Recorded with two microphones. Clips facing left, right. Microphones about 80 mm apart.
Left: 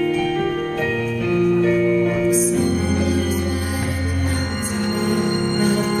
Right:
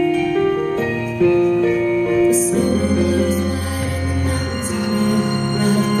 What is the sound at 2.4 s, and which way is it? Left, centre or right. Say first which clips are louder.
Music: right 2 dB; right.